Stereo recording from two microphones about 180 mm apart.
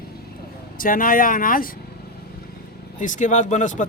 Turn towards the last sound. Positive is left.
turn(degrees=45)  # may be behind; listen again after turning